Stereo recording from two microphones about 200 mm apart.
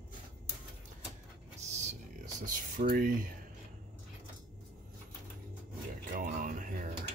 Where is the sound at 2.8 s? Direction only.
45° right (ahead or behind).